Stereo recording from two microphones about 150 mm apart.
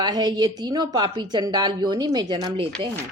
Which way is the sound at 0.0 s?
25° right (ahead or behind).